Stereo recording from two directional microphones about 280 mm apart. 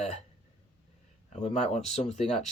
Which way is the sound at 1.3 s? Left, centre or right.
Left.